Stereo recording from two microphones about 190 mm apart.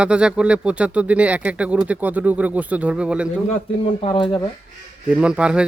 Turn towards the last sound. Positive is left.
turn(degrees=-5)  # may be behind; listen again after turning